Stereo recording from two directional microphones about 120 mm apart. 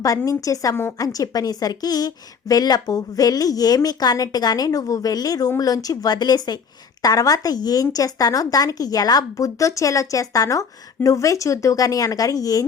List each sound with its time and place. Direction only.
0.3 s a woman's voice: 30° left (ahead or behind)